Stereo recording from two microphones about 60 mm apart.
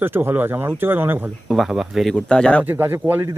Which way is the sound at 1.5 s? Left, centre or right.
Centre.